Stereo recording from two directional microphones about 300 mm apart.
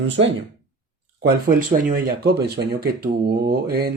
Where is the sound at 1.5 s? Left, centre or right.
Right.